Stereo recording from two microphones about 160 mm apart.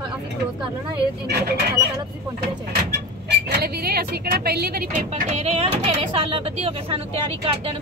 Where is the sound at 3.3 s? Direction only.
85° right; by 7.7 s 35° right (ahead or behind).